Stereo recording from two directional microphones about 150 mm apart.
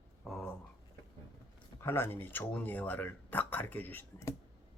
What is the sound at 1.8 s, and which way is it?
Speech, 15° left (ahead or behind).